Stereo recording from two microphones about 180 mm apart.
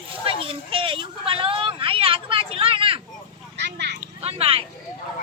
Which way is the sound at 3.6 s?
70° right (ahead or behind).